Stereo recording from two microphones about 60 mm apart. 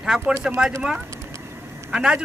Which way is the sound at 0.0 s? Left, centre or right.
Centre.